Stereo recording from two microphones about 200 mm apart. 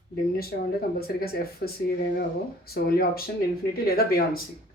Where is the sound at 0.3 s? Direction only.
50° left (ahead or behind).